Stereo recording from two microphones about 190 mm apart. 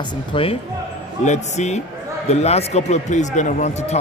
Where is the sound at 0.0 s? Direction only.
30° left (ahead or behind).